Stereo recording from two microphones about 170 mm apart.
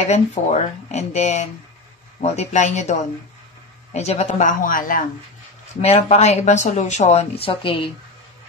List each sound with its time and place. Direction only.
0.0 s speech: 40° left (ahead or behind)
5.8 s speech: 40° left (ahead or behind)